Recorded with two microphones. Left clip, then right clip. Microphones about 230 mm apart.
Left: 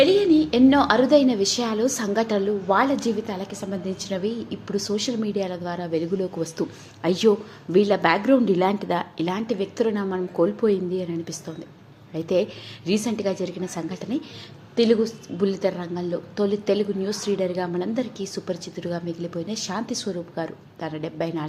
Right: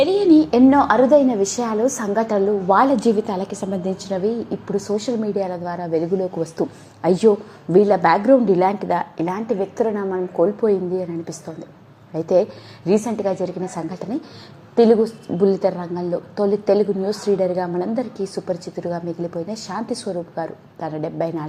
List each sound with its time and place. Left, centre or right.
0.0 s a sound: centre
0.7 s a woman's voice: centre
8.3 s a woman's voice: centre
9.5 s a woman's voice: centre
12.1 s a woman's voice: centre